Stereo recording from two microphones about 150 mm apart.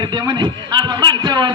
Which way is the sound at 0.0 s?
30° right (ahead or behind).